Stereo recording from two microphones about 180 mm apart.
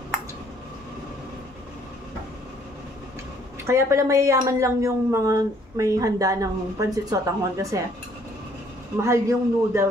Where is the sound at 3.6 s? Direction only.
15° right (ahead or behind).